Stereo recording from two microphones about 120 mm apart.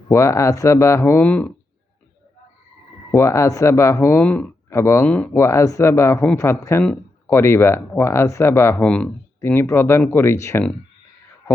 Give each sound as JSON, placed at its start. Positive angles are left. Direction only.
{"t": 0.1, "sound": "speech", "side_deg": 25}
{"t": 3.1, "sound": "speech", "side_deg": 25}
{"t": 4.7, "sound": "speech", "side_deg": 25}
{"t": 5.0, "sound": "speech", "side_deg": 10}
{"t": 5.3, "sound": "speech", "side_deg": 25}